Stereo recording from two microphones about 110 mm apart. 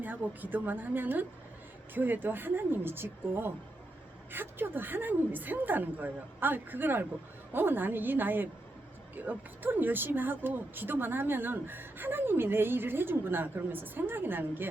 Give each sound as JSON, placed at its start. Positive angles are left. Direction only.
{"t": 0.0, "sound": "a woman's voice", "side_deg": -15}